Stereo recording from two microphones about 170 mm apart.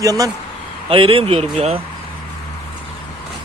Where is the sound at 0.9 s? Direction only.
35° right (ahead or behind).